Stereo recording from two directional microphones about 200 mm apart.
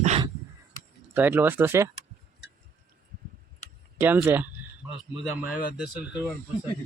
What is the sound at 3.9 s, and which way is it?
Speech, 10° right (ahead or behind).